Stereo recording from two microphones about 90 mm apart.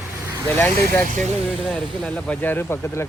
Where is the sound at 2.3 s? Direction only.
20° left (ahead or behind).